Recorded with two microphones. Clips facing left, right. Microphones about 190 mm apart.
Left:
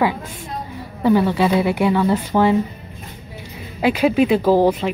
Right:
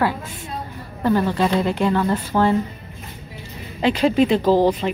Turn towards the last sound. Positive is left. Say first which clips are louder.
# left 1 dB
turn(degrees=10)  # may be behind; listen again after turning